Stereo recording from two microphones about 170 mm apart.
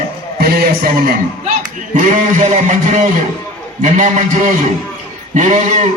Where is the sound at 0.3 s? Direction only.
65° right (ahead or behind).